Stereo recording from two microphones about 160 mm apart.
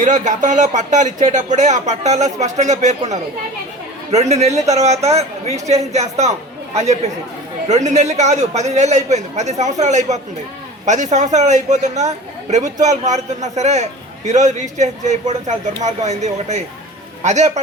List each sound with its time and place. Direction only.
0.0 s speech: 50° right (ahead or behind)
4.1 s speech: 45° right (ahead or behind)